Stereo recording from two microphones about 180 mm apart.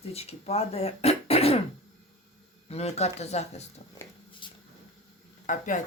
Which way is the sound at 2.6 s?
35° left (ahead or behind).